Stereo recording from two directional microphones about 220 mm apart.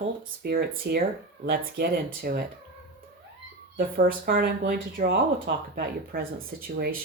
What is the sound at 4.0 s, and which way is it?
Speech, 40° right (ahead or behind).